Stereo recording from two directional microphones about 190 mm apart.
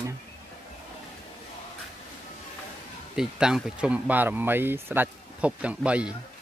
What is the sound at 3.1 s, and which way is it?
Speech, 5° right (ahead or behind).